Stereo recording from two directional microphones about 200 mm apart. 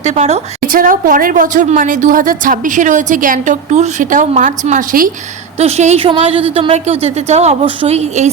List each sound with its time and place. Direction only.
0.0 s a woman's voice: 35° right (ahead or behind)